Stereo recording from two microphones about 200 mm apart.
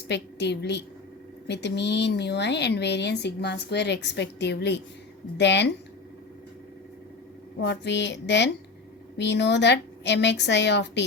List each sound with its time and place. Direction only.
0.1 s speech: 60° left (ahead or behind)
7.6 s speech: 60° left (ahead or behind)